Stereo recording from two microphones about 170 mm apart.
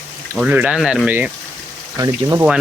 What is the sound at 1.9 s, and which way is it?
Speech, 20° right (ahead or behind).